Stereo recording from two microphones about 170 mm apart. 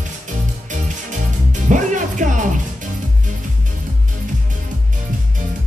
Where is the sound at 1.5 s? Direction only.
45° right (ahead or behind).